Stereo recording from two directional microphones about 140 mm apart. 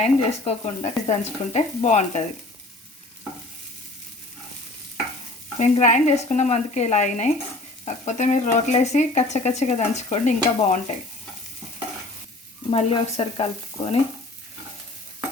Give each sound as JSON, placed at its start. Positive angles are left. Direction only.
{"t": 0.0, "sound": "frying", "side_deg": 50}
{"t": 5.5, "sound": "speech", "side_deg": 55}
{"t": 12.7, "sound": "frying", "side_deg": 40}